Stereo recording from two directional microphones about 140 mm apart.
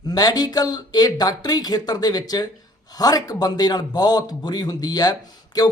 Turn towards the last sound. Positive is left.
turn(degrees=30)  # may be behind; listen again after turning